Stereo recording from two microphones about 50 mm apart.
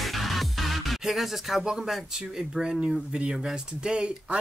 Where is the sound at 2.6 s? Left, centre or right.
Centre.